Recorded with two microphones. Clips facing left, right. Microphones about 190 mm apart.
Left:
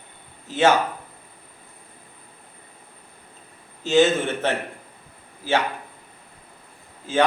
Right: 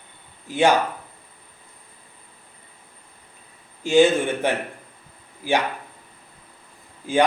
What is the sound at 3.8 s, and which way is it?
Speech, 10° right (ahead or behind).